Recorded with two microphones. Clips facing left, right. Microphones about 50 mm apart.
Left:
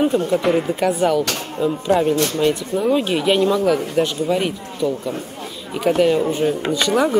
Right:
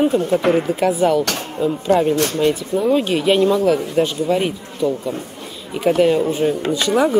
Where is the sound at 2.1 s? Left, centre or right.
Right.